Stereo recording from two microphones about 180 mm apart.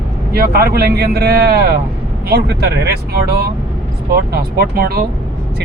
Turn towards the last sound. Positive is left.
turn(degrees=-55)  # may be behind; listen again after turning